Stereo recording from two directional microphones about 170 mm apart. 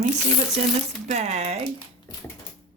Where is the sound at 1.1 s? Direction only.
40° right (ahead or behind).